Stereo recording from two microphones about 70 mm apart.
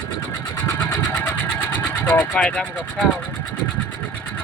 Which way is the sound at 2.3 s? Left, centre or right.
Centre.